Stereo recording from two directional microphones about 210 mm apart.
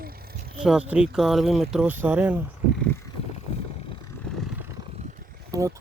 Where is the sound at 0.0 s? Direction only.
45° right (ahead or behind).